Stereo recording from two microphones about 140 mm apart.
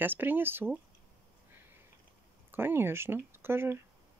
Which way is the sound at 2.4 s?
15° right (ahead or behind).